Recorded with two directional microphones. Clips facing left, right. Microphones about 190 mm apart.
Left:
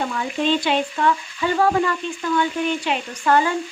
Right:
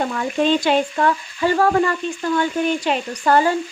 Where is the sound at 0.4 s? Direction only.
45° right (ahead or behind).